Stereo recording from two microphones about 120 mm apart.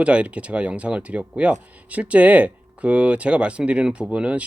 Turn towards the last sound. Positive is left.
turn(degrees=-10)  # may be behind; listen again after turning